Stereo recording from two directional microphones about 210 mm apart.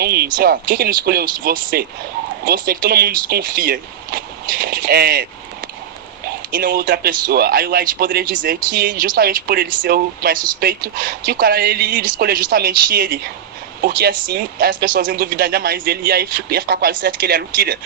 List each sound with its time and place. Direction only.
0.0 s a sound: 50° right (ahead or behind)
0.3 s speech: 45° right (ahead or behind)
6.5 s speech: 45° right (ahead or behind)